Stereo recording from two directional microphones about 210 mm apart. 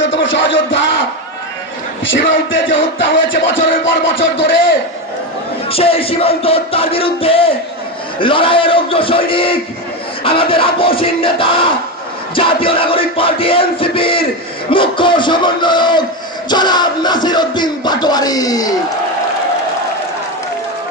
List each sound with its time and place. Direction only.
0.0 s music: 60° left (ahead or behind)
2.0 s music: 65° left (ahead or behind)
5.7 s music: 25° left (ahead or behind)